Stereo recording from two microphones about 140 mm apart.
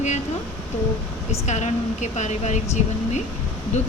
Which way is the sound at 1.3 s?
55° left (ahead or behind).